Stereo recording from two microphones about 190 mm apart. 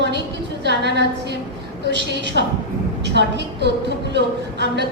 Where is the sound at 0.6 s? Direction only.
65° right (ahead or behind).